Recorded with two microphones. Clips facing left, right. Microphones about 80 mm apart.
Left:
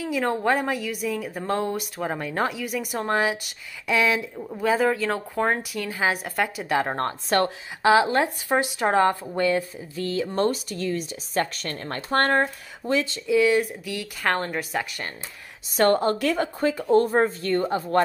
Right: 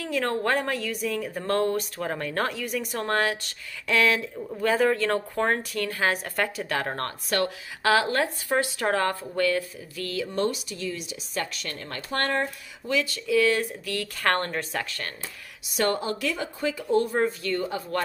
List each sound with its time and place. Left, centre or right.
0.0 s a woman's voice: centre
6.9 s speech: left
10.3 s a woman's voice: left; by 15.0 s centre
15.7 s a woman's voice: left